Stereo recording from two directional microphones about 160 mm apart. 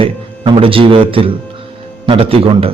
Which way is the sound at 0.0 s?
35° right (ahead or behind).